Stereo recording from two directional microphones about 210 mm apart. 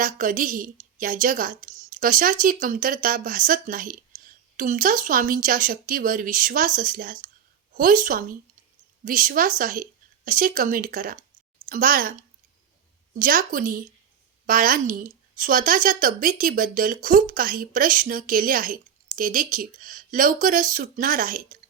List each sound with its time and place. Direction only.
0.0 s speech: 40° right (ahead or behind)
13.1 s speech: 40° right (ahead or behind)